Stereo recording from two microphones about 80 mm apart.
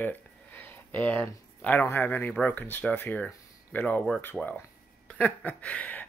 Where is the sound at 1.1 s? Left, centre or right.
Centre.